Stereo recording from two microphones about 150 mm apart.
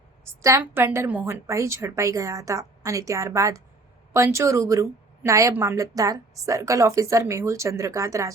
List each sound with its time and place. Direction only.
0.4 s a woman's voice: 15° right (ahead or behind)